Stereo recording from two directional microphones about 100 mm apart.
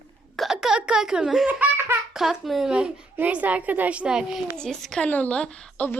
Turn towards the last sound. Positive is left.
turn(degrees=15)  # may be behind; listen again after turning